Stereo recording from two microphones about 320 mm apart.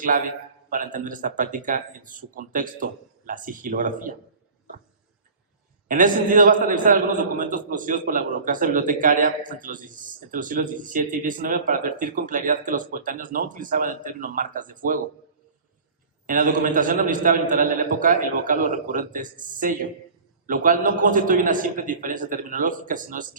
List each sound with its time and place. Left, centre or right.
0.7 s a man's voice: right
5.9 s a man's voice: right
16.2 s a man's voice: right